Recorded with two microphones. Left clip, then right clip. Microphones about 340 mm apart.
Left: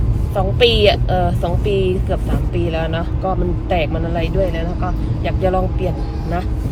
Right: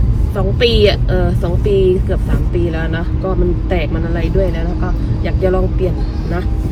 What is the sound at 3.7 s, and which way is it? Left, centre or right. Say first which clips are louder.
Speech: left 1 dB; left.